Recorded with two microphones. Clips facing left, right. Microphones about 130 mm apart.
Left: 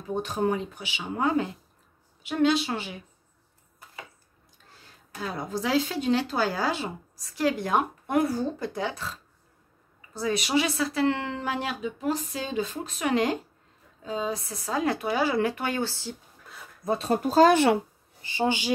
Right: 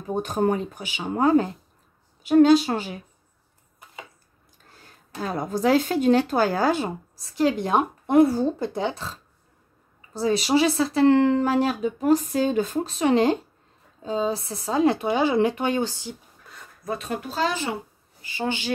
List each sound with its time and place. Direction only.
0.1 s speech: 45° right (ahead or behind)
5.2 s speech: 50° right (ahead or behind)
7.2 s speech: 25° right (ahead or behind); by 12.8 s 50° right (ahead or behind)
12.8 s speech: 30° right (ahead or behind)
16.8 s speech: 30° left (ahead or behind); by 17.6 s 45° left (ahead or behind)
18.2 s speech: 20° left (ahead or behind)